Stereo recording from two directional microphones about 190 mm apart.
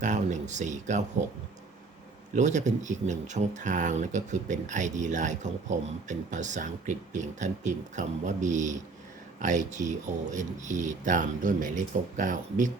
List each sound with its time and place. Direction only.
0.0 s speech: 40° right (ahead or behind)
2.3 s speech: 40° right (ahead or behind)